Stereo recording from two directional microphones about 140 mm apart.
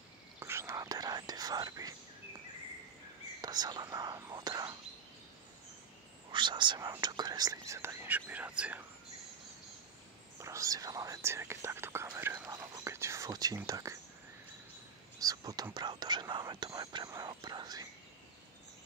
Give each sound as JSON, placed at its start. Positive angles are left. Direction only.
{"t": 0.4, "sound": "speech", "side_deg": -20}
{"t": 3.3, "sound": "speech", "side_deg": -30}
{"t": 6.3, "sound": "speech", "side_deg": -35}
{"t": 10.4, "sound": "speech", "side_deg": -20}
{"t": 15.1, "sound": "speech", "side_deg": -25}